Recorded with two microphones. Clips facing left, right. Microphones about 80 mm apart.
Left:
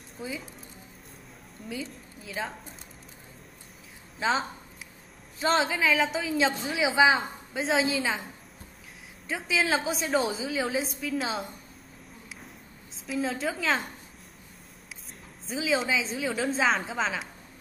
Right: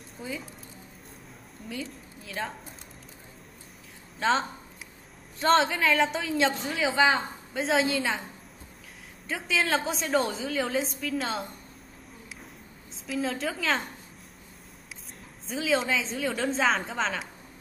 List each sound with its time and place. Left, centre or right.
0.2 s a woman's voice: centre
1.7 s a woman's voice: centre
4.2 s a woman's voice: centre
9.3 s a woman's voice: centre
13.0 s a woman's voice: centre
15.4 s a woman's voice: centre